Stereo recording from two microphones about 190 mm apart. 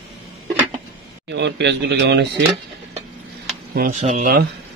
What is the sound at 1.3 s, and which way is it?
Speech, 65° right (ahead or behind).